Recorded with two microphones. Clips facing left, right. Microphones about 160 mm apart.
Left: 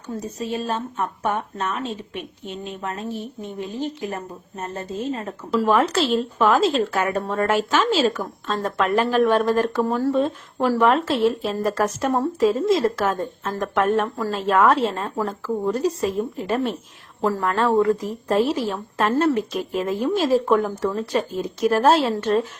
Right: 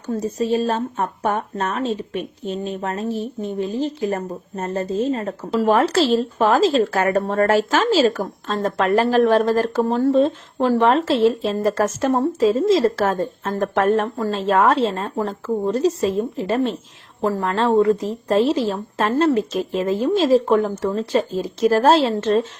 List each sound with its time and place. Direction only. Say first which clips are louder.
0.3 s speech: right 6 dB; 35° right (ahead or behind)